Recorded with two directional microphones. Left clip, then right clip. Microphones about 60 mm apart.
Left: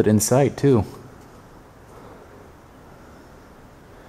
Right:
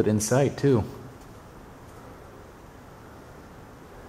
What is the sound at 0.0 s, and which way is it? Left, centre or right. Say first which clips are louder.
Speech: left 5 dB; left.